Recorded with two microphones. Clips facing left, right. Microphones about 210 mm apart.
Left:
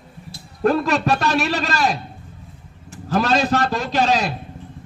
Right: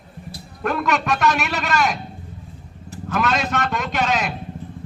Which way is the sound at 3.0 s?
30° left (ahead or behind).